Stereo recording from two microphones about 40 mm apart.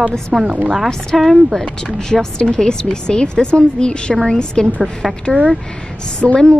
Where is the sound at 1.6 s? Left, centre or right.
Centre.